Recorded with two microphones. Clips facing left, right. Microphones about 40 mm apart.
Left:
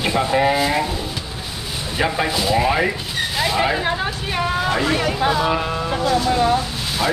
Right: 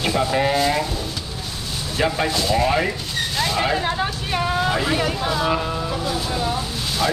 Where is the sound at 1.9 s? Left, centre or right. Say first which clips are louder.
Left 1 dB; centre.